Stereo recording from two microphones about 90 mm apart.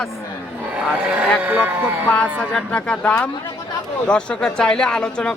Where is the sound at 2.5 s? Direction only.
10° left (ahead or behind).